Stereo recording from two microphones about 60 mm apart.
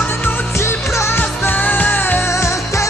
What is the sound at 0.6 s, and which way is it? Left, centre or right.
Music, left.